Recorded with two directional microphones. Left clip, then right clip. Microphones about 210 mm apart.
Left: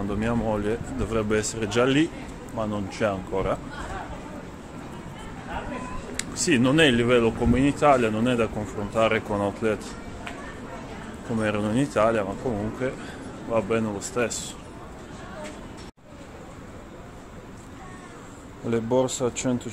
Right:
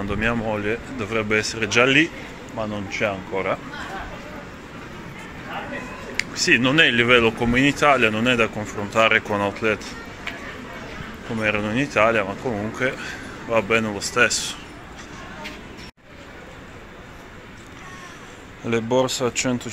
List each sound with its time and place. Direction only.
0.1 s speech: 5° left (ahead or behind)
6.1 s speech: 15° left (ahead or behind)
11.3 s speech: 15° left (ahead or behind)
18.7 s speech: centre (ahead or behind)